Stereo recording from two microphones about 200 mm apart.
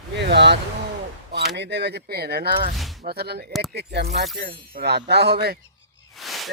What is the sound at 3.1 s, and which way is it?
Speech, 50° right (ahead or behind).